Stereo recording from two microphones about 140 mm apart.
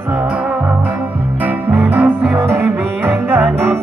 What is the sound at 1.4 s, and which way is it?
Music, 10° right (ahead or behind).